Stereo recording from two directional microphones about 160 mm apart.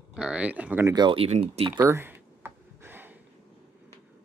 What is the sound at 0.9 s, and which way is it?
Speech, 30° right (ahead or behind).